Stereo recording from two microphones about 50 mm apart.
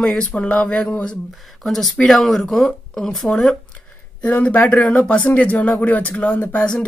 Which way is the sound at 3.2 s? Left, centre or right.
Centre.